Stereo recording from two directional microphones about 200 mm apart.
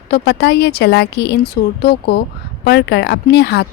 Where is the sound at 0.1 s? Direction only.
55° left (ahead or behind).